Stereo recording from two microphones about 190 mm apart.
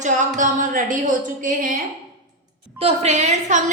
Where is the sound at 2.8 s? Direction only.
35° right (ahead or behind).